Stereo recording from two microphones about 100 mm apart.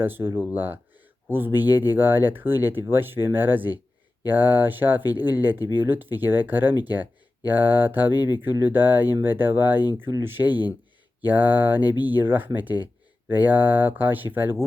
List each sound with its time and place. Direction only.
0.0 s speech: 20° right (ahead or behind)
10.5 s speech: 45° left (ahead or behind)
11.2 s speech: 20° right (ahead or behind)